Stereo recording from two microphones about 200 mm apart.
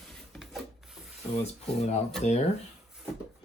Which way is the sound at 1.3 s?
30° left (ahead or behind).